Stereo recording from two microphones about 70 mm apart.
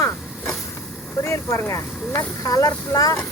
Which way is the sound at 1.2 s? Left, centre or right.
Left.